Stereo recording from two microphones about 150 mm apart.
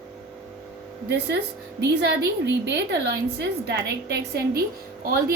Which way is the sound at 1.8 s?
90° right.